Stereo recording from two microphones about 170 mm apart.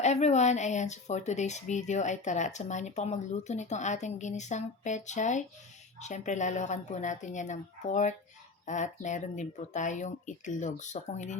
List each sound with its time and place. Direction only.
0.0 s speech: 40° left (ahead or behind)